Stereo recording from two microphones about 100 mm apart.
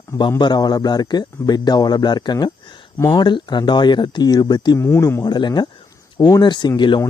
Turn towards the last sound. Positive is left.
turn(degrees=50)  # may be behind; listen again after turning